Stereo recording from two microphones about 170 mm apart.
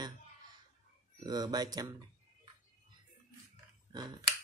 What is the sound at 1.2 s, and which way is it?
Speech, 25° right (ahead or behind).